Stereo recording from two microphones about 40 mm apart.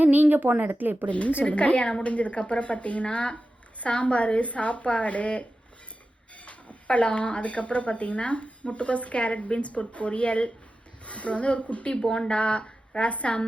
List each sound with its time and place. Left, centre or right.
0.0 s a woman's voice: right
1.0 s speech: left